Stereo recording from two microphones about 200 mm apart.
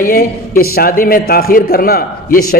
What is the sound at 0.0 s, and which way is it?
A man's voice, 45° left (ahead or behind).